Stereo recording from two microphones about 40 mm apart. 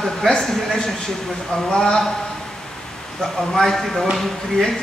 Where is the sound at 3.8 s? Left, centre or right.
Centre.